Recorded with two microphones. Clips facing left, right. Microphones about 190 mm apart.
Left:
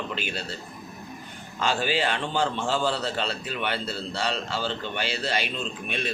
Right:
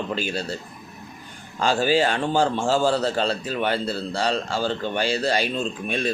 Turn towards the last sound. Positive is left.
turn(degrees=-40)  # may be behind; listen again after turning